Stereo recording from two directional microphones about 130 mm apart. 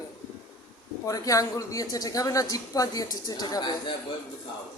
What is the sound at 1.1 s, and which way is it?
Speech, 25° left (ahead or behind).